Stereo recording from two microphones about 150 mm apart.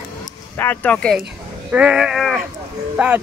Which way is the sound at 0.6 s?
10° left (ahead or behind).